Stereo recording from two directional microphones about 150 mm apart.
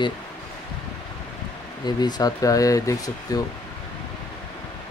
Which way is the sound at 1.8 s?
25° left (ahead or behind).